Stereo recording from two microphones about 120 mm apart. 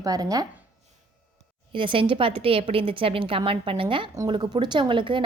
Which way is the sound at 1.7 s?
45° right (ahead or behind).